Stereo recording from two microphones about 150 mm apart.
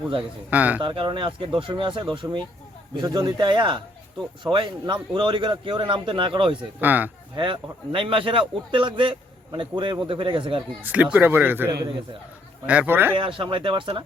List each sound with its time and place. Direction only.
0.2 s a man's voice: 10° right (ahead or behind)
0.8 s a man's voice: 35° right (ahead or behind)
6.6 s a man's voice: 10° right (ahead or behind)
7.3 s a man's voice: 35° right (ahead or behind)
10.8 s a man's voice: 10° right (ahead or behind)
12.6 s a man's voice: 10° right (ahead or behind)
13.1 s a man's voice: 35° right (ahead or behind)